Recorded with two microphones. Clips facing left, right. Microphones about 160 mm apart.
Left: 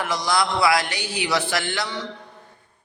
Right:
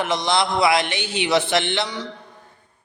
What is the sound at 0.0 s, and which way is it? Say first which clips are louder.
A man's voice: right 2 dB; 25° right (ahead or behind).